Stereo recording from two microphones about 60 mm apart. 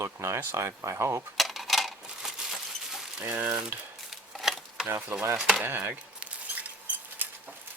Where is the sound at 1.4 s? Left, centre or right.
Centre.